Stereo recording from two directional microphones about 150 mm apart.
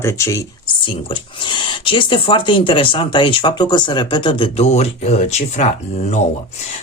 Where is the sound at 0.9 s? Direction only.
35° left (ahead or behind).